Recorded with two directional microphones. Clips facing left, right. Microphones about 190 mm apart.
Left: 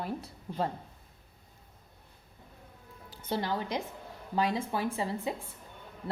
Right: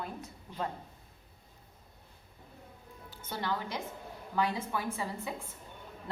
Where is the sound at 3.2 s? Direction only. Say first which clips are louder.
Left 4 dB; 30° left (ahead or behind).